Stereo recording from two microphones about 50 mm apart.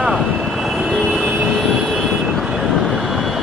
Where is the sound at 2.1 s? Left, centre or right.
Centre.